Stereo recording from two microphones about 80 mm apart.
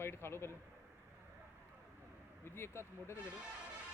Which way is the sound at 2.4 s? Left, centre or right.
Left.